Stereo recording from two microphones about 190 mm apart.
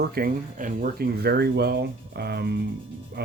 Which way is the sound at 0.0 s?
50° right (ahead or behind).